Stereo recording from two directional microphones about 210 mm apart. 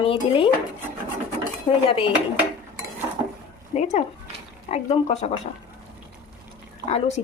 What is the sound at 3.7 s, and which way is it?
Speech, 35° left (ahead or behind).